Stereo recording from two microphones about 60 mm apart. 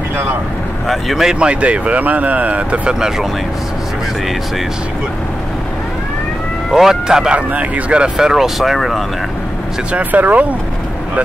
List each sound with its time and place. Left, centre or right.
0.8 s speech: centre
1.4 s speech: right
6.7 s speech: centre
9.9 s speech: right